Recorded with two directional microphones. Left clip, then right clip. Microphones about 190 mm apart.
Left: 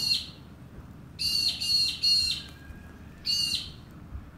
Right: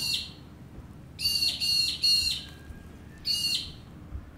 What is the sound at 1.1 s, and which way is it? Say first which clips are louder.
Bird: even; 55° right (ahead or behind).